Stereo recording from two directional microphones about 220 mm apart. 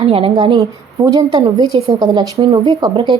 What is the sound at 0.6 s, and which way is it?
A woman's voice, 15° right (ahead or behind).